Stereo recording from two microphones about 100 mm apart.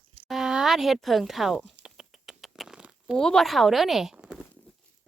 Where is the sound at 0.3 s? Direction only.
5° right (ahead or behind).